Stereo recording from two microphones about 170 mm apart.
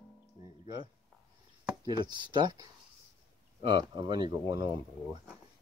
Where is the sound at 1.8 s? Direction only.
25° right (ahead or behind).